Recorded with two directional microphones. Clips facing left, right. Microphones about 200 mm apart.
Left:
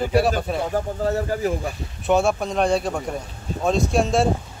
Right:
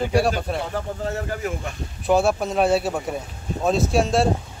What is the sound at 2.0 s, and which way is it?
Speech, centre (ahead or behind).